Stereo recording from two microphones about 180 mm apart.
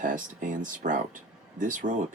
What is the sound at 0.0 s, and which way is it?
Speech, 45° right (ahead or behind).